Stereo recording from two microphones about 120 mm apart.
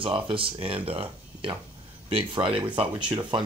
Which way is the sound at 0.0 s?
45° right (ahead or behind).